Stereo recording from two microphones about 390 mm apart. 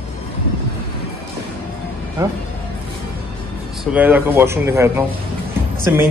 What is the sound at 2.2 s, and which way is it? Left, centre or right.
Speech, centre.